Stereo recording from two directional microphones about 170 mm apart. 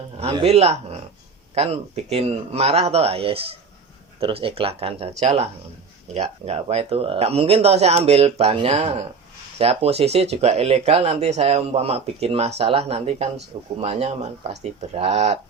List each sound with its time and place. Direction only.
0.2 s speech: 35° right (ahead or behind)